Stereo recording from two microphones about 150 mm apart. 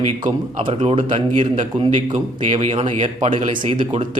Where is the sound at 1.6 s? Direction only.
55° right (ahead or behind).